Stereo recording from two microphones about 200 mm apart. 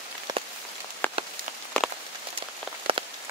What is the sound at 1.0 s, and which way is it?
Rain on surface, 10° left (ahead or behind).